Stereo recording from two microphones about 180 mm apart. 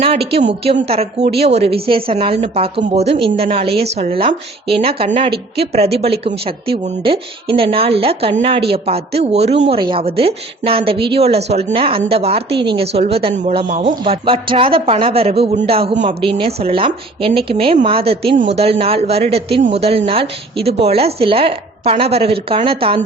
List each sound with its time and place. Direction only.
0.6 s a woman's voice: 35° right (ahead or behind)
13.9 s a woman's voice: 30° right (ahead or behind)